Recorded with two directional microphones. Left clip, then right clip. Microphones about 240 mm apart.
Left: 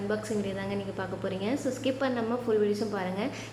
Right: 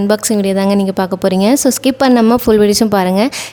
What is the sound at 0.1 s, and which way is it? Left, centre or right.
A woman's voice, right.